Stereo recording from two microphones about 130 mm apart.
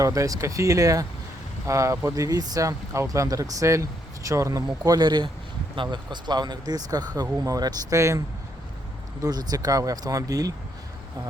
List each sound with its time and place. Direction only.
0.0 s speech: 25° right (ahead or behind)
9.2 s speech: 30° right (ahead or behind)